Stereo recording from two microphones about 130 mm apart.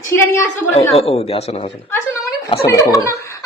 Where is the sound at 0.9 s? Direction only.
50° left (ahead or behind).